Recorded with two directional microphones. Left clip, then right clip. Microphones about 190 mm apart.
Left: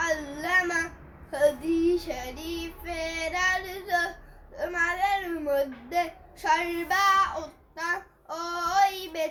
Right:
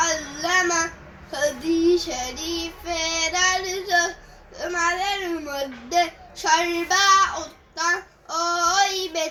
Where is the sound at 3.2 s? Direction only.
10° left (ahead or behind).